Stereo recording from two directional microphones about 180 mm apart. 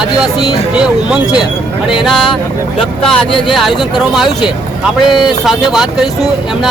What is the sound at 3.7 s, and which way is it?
Speech, 25° left (ahead or behind).